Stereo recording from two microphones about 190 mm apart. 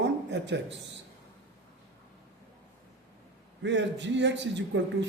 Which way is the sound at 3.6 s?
70° right (ahead or behind).